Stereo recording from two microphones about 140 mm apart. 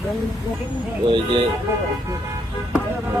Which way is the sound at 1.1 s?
35° right (ahead or behind).